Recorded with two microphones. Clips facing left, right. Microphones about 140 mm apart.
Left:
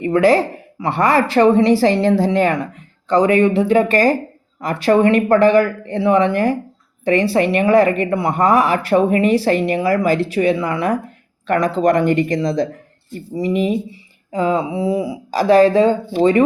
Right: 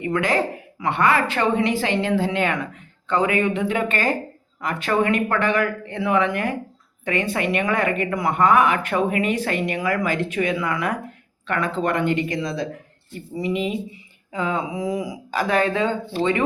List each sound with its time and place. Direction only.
0.0 s a woman's voice: 35° left (ahead or behind)